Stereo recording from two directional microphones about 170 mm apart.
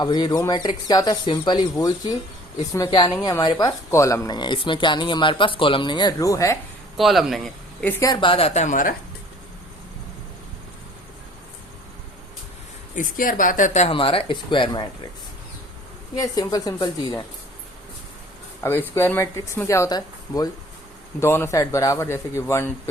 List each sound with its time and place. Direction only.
0.0 s speech: 25° left (ahead or behind)
6.9 s speech: centre (ahead or behind); by 9.0 s 50° left (ahead or behind)
13.0 s speech: 55° left (ahead or behind); by 14.8 s 30° left (ahead or behind)
16.1 s speech: 20° left (ahead or behind)
18.6 s speech: 15° left (ahead or behind)